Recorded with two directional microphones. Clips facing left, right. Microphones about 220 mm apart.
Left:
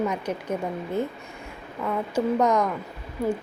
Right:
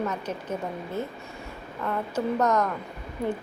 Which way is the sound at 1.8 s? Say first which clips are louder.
Left 3 dB; 10° left (ahead or behind).